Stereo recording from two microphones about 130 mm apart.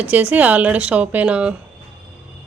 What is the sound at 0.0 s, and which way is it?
A woman's voice, 10° right (ahead or behind).